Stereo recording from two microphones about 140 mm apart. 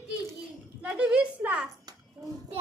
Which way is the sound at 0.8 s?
10° right (ahead or behind).